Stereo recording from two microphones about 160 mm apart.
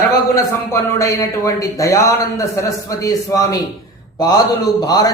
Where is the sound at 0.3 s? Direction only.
20° left (ahead or behind).